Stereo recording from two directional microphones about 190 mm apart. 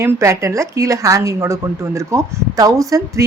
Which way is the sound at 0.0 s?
15° right (ahead or behind).